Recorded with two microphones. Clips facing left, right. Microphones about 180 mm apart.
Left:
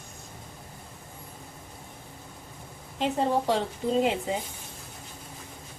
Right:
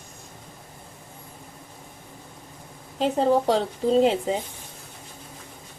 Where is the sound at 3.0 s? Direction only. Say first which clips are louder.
Right 5 dB; 35° right (ahead or behind).